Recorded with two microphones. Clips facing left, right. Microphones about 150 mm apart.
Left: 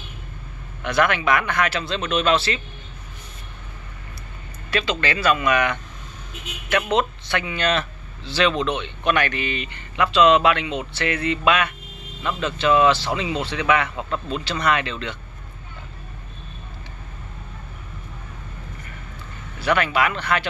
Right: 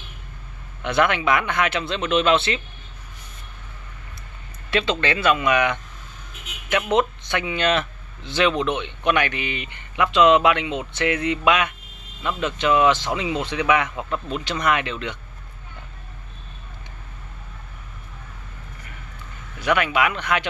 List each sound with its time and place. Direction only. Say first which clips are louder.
0.8 s speech: even; 20° right (ahead or behind)
4.6 s speech: right 2 dB; 20° right (ahead or behind)
19.6 s speech: even; 10° right (ahead or behind)